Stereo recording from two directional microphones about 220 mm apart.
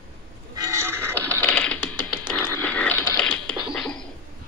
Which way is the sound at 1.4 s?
5° left (ahead or behind).